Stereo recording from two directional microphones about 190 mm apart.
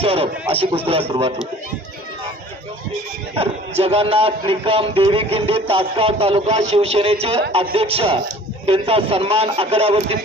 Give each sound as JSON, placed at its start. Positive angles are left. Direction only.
{"t": 0.0, "sound": "speech", "side_deg": -30}
{"t": 3.3, "sound": "speech", "side_deg": -30}